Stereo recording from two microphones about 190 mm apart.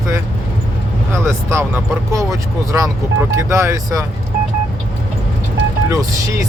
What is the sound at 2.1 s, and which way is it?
Speech, 15° right (ahead or behind).